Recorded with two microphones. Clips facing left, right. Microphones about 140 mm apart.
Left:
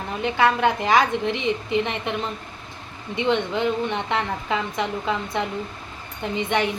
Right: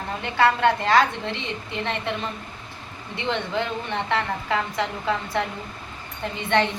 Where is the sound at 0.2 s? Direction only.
15° left (ahead or behind).